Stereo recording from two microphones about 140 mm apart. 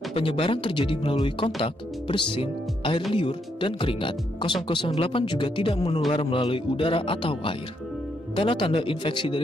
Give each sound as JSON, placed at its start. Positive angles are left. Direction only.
{"t": 0.1, "sound": "speech", "side_deg": 40}